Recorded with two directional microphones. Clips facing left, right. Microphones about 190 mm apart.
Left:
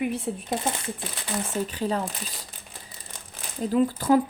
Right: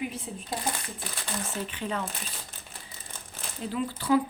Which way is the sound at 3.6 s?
45° left (ahead or behind).